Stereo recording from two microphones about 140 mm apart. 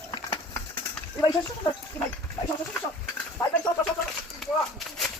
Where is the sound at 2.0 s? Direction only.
15° left (ahead or behind).